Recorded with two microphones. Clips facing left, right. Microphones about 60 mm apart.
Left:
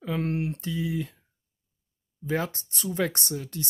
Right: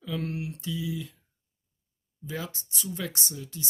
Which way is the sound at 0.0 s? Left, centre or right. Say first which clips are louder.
Left 5 dB; left.